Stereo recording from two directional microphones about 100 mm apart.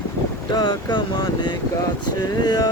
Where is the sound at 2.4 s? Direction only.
40° left (ahead or behind).